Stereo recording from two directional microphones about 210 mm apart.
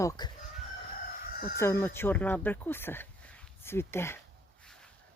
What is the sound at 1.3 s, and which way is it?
Chicken, 45° left (ahead or behind).